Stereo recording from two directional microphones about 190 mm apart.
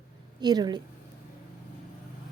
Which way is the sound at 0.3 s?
20° right (ahead or behind).